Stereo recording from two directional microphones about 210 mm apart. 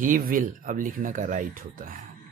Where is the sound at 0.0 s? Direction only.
40° right (ahead or behind).